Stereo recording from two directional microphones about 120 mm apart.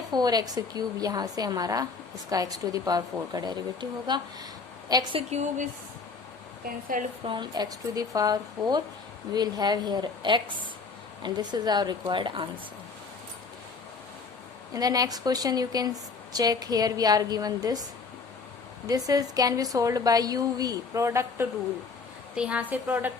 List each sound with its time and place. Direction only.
0.1 s a woman's voice: 35° right (ahead or behind)
5.1 s a woman's voice: 70° right (ahead or behind)
7.3 s a woman's voice: 35° right (ahead or behind)
14.7 s a woman's voice: 30° right (ahead or behind)
18.9 s a woman's voice: 30° right (ahead or behind)
22.4 s a woman's voice: 10° right (ahead or behind)